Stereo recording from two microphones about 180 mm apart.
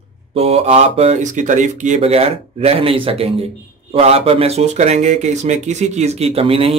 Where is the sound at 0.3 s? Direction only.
35° right (ahead or behind).